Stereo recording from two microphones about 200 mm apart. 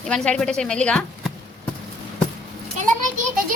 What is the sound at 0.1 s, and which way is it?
Speech, 5° left (ahead or behind).